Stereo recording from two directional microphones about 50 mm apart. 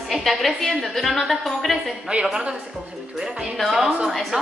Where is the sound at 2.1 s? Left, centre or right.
Right.